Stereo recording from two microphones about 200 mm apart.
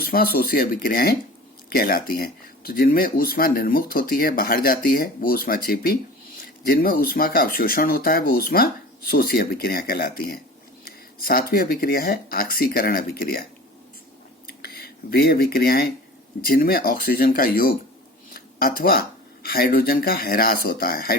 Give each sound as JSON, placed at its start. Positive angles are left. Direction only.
{"t": 0.0, "sound": "speech", "side_deg": 50}
{"t": 14.4, "sound": "a sound", "side_deg": 50}
{"t": 16.5, "sound": "speech", "side_deg": 45}